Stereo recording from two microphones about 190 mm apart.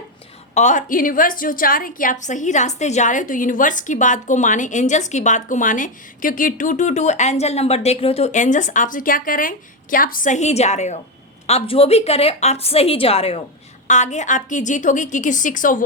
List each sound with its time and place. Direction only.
0.5 s a woman's voice: 40° left (ahead or behind)